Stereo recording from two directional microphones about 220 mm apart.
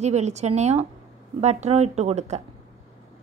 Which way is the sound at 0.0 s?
30° right (ahead or behind).